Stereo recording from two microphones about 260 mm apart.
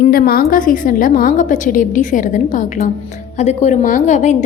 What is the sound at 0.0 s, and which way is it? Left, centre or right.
A woman's voice, left.